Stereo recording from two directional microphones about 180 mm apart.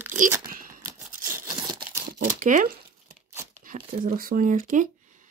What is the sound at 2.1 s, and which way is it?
Crumpling, 45° right (ahead or behind).